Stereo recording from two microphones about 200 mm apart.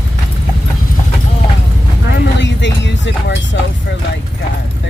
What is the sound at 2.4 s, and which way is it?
Music, 65° left (ahead or behind).